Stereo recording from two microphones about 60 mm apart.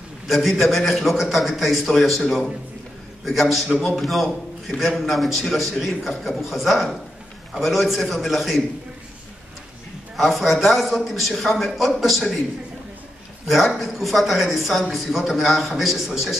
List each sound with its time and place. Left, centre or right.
0.3 s a man's voice: centre
3.3 s a man's voice: centre
10.1 s a man's voice: centre
13.5 s a man's voice: centre